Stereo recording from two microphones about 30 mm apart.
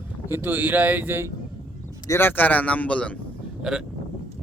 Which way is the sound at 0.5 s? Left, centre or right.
Right.